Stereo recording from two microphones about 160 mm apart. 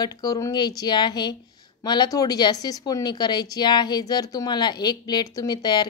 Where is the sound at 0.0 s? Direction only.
25° left (ahead or behind).